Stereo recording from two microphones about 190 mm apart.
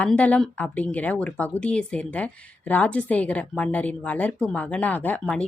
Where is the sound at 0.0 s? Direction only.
5° left (ahead or behind).